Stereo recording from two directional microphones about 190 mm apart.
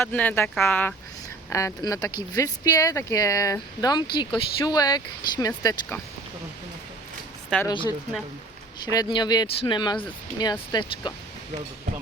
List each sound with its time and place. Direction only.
0.0 s speech: 10° left (ahead or behind)
7.7 s speech: 25° left (ahead or behind)